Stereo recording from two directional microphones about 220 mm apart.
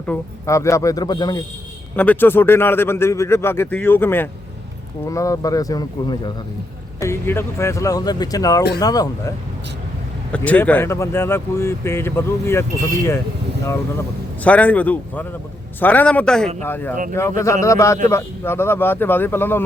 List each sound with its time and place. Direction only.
0.0 s a man's voice: 10° left (ahead or behind)
2.0 s a man's voice: 10° left (ahead or behind)
10.3 s a man's voice: 5° left (ahead or behind)
14.4 s a man's voice: 5° left (ahead or behind)
16.9 s a man's voice: 35° right (ahead or behind)
17.2 s a man's voice: 15° left (ahead or behind)